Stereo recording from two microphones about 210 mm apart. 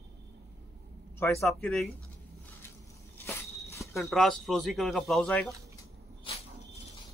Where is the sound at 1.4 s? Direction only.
Centre (ahead or behind).